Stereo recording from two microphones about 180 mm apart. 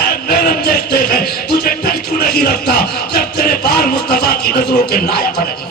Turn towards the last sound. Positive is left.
turn(degrees=60)  # may be behind; listen again after turning